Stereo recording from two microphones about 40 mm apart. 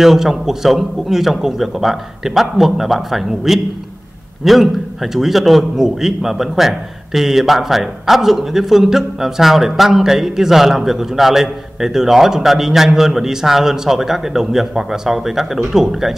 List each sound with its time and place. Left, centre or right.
0.0 s a man's voice: centre